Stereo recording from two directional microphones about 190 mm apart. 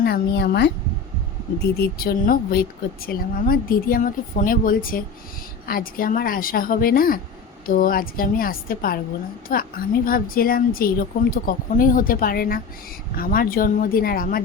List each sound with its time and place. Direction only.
0.0 s speech: 55° left (ahead or behind)
1.8 s speech: 50° left (ahead or behind)